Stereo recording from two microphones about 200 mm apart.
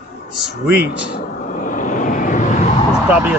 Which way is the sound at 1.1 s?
40° left (ahead or behind).